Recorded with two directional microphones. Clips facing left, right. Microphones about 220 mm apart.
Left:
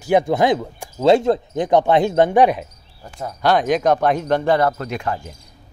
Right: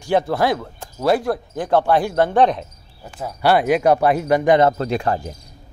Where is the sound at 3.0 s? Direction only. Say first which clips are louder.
Right 1 dB; 5° right (ahead or behind).